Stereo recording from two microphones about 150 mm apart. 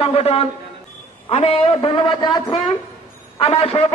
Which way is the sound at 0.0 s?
40° left (ahead or behind).